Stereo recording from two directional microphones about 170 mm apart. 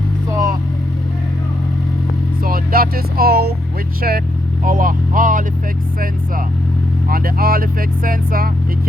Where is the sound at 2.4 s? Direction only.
60° right (ahead or behind).